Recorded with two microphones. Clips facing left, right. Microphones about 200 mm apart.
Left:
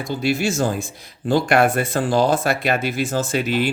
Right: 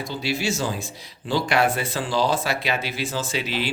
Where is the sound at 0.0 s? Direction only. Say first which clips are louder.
Left 5 dB; 50° left (ahead or behind).